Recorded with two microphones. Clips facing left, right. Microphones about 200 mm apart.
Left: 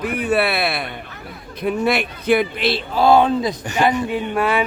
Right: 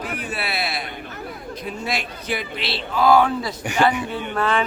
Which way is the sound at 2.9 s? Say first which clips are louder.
Left 2 dB; 25° left (ahead or behind).